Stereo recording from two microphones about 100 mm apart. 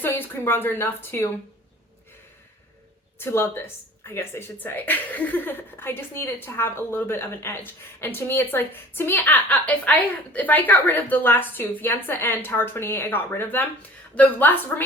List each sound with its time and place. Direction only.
0.0 s a woman's voice: 20° left (ahead or behind)
3.3 s a woman's voice: 20° left (ahead or behind)